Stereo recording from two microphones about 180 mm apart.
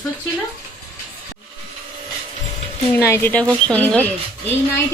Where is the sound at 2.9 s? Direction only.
15° left (ahead or behind).